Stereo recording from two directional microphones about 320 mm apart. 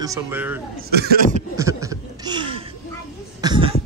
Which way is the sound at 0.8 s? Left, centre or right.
Right.